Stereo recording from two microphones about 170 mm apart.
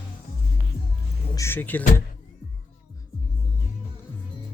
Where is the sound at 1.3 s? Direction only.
15° left (ahead or behind).